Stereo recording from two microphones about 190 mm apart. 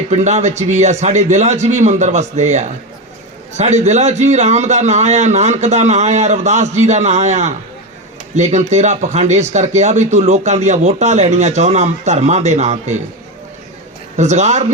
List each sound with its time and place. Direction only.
0.1 s speech: 35° right (ahead or behind)
14.2 s speech: 40° right (ahead or behind)